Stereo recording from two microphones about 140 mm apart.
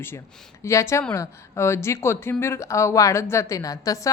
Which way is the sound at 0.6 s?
20° left (ahead or behind).